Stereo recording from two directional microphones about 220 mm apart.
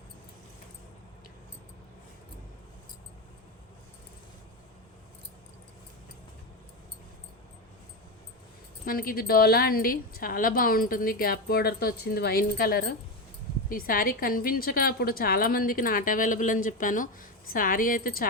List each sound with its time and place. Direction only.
8.8 s a woman's voice: 40° left (ahead or behind)